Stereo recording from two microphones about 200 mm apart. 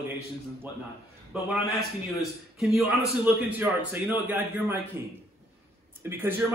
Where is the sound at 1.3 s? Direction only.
5° right (ahead or behind).